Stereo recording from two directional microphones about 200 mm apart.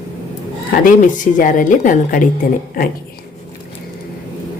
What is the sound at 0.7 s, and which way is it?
A woman's voice, 40° left (ahead or behind).